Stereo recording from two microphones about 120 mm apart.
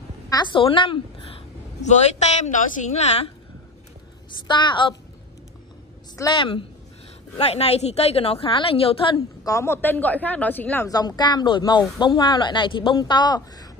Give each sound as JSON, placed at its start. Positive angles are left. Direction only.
{"t": 0.3, "sound": "a woman's voice", "side_deg": 40}
{"t": 1.8, "sound": "a woman's voice", "side_deg": 75}
{"t": 4.5, "sound": "a woman's voice", "side_deg": 40}
{"t": 6.2, "sound": "a woman's voice", "side_deg": 25}
{"t": 7.3, "sound": "a woman's voice", "side_deg": 60}
{"t": 9.4, "sound": "a woman's voice", "side_deg": 25}
{"t": 10.9, "sound": "a woman's voice", "side_deg": 35}